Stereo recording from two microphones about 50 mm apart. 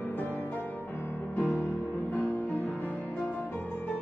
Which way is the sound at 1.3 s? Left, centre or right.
Left.